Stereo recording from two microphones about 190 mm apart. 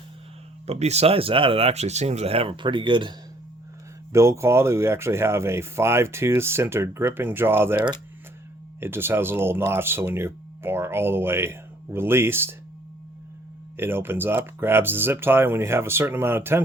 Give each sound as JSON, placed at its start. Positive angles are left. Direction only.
{"t": 0.7, "sound": "speech", "side_deg": -35}
{"t": 4.1, "sound": "speech", "side_deg": -15}
{"t": 13.7, "sound": "speech", "side_deg": -10}